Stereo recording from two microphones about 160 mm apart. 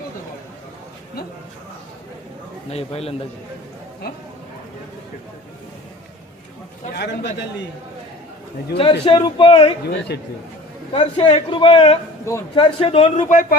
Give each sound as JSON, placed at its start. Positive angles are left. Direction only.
{"t": 2.6, "sound": "a man's voice", "side_deg": 40}
{"t": 6.9, "sound": "a man's voice", "side_deg": 90}
{"t": 8.8, "sound": "a man's voice", "side_deg": 35}
{"t": 10.1, "sound": "a man's voice", "side_deg": 90}
{"t": 10.9, "sound": "a man's voice", "side_deg": 30}
{"t": 13.3, "sound": "a man's voice", "side_deg": 55}